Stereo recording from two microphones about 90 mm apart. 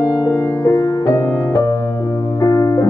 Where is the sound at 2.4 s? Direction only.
40° left (ahead or behind).